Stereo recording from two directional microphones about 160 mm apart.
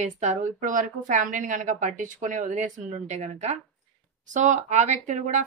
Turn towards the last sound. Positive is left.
turn(degrees=-50)  # may be behind; listen again after turning